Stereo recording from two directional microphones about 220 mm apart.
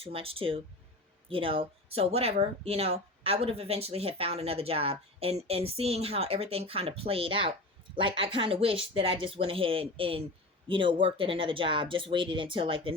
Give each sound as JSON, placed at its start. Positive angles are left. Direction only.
{"t": 0.0, "sound": "speech", "side_deg": -25}